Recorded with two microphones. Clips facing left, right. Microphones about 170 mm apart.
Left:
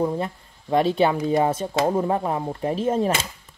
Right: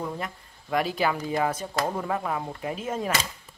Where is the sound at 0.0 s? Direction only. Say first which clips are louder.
Left 9 dB; 30° left (ahead or behind).